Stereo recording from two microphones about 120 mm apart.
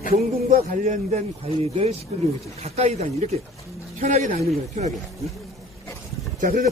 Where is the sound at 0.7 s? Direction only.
90° right.